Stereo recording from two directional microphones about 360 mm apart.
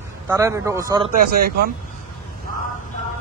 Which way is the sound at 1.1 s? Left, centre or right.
Right.